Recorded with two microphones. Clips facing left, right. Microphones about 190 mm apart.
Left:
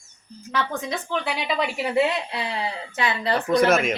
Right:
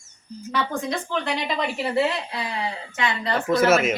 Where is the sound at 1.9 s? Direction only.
25° left (ahead or behind).